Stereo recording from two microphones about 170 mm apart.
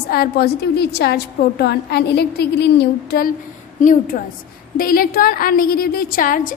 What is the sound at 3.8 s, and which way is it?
A woman's voice, 50° left (ahead or behind).